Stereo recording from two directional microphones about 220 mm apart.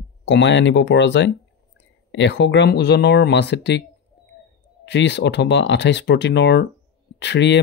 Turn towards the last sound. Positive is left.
turn(degrees=55)  # may be behind; listen again after turning